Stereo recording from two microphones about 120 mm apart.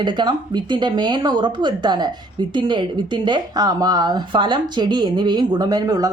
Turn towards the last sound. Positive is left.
turn(degrees=-30)  # may be behind; listen again after turning